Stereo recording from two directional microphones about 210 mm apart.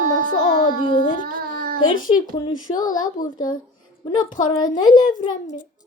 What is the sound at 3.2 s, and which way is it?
Child singing, 40° left (ahead or behind).